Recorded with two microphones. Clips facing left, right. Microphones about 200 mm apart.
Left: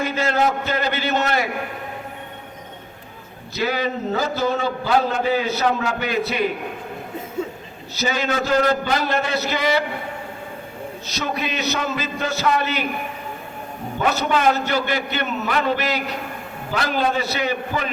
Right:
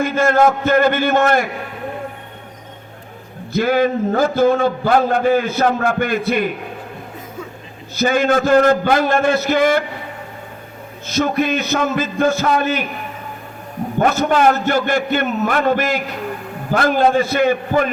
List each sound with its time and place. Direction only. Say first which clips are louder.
0.0 s a man's voice: right 6 dB; 50° right (ahead or behind)
3.5 s a man's voice: right 7 dB; 50° right (ahead or behind)
7.4 s a sound: left 6 dB; 25° left (ahead or behind)
7.9 s a man's voice: right 7 dB; 50° right (ahead or behind)
11.0 s a man's voice: right 9 dB; 50° right (ahead or behind)
14.0 s a man's voice: right 5 dB; 50° right (ahead or behind)